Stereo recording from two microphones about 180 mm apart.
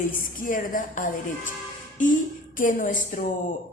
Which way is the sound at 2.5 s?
50° left (ahead or behind).